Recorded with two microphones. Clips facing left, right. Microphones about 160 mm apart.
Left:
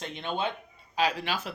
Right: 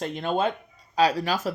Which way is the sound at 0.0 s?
40° right (ahead or behind).